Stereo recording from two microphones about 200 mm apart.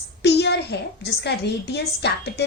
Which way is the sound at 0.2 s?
55° left (ahead or behind).